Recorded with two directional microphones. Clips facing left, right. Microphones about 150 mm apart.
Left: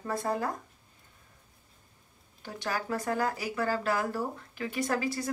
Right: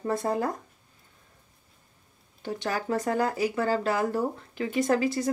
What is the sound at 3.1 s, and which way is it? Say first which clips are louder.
Speech: right 4 dB; 25° right (ahead or behind).